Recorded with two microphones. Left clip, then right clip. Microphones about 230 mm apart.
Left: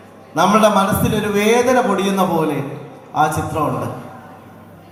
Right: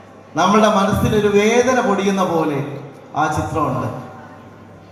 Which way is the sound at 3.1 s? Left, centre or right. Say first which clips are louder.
Left 2 dB; left.